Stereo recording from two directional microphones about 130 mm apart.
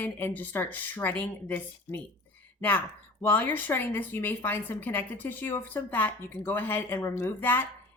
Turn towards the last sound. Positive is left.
turn(degrees=15)  # may be behind; listen again after turning